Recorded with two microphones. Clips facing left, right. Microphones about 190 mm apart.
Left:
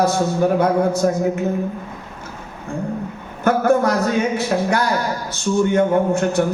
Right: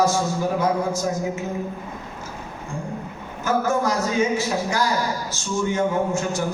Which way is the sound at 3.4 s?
60° left (ahead or behind).